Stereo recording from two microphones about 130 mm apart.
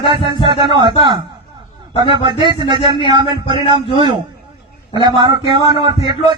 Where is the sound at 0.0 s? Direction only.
40° right (ahead or behind).